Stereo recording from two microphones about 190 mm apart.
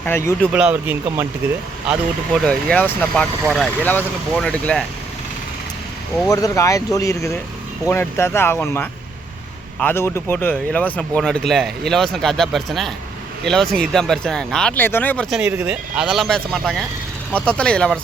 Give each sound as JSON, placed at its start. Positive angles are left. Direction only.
{"t": 0.0, "sound": "speech", "side_deg": 10}
{"t": 0.5, "sound": "speech", "side_deg": -10}
{"t": 1.9, "sound": "speech", "side_deg": 0}
{"t": 6.3, "sound": "speech", "side_deg": 15}